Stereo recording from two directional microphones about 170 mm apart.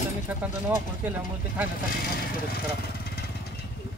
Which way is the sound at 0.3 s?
10° right (ahead or behind).